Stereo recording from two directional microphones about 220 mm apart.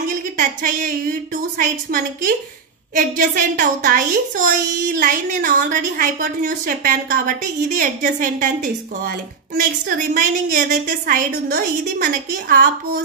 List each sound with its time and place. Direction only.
0.4 s a woman's voice: 35° right (ahead or behind)